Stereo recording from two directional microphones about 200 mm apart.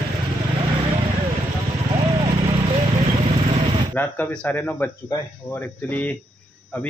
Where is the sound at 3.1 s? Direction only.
25° right (ahead or behind).